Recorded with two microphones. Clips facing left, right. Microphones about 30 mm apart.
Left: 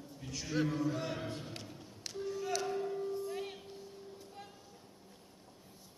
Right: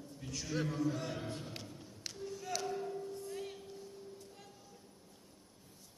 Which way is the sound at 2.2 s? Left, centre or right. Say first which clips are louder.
Left 4 dB; centre.